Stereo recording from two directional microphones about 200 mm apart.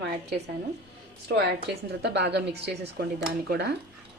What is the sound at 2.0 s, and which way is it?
A woman's voice, 60° right (ahead or behind).